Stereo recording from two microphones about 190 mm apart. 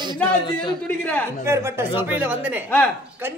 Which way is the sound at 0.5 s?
25° left (ahead or behind).